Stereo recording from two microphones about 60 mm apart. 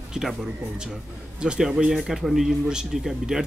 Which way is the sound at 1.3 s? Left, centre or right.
Centre.